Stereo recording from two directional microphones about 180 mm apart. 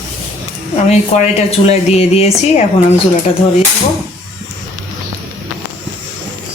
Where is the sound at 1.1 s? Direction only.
35° left (ahead or behind).